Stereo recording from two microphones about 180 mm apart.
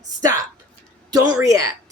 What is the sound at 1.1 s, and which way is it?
Speech, 20° right (ahead or behind).